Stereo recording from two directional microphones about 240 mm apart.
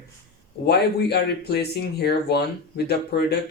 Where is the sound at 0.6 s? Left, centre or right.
Left.